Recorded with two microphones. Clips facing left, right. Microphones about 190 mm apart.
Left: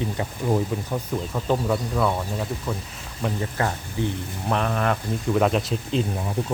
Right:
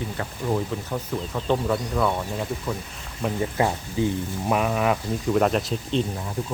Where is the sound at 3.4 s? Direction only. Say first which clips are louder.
Right 3 dB; 15° right (ahead or behind); by 6.0 s centre (ahead or behind).